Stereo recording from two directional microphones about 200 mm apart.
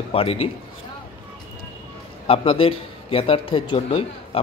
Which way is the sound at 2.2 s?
25° left (ahead or behind).